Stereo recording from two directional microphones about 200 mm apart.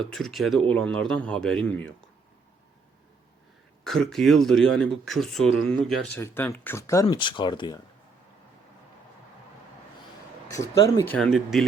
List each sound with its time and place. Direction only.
0.0 s speech: centre (ahead or behind)
3.8 s speech: centre (ahead or behind); by 7.8 s 25° left (ahead or behind)
10.5 s speech: 15° left (ahead or behind)